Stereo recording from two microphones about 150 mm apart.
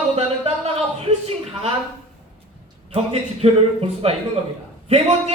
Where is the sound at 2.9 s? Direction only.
40° right (ahead or behind).